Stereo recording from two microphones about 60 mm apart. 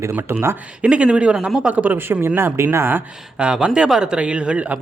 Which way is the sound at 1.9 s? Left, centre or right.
Right.